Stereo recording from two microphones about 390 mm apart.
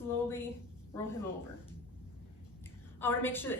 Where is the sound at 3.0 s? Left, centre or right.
Centre.